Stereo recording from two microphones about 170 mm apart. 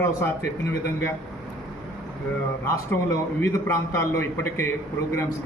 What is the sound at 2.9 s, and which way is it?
A man's voice, 20° left (ahead or behind).